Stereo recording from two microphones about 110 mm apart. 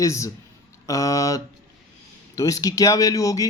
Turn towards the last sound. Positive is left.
turn(degrees=30)  # may be behind; listen again after turning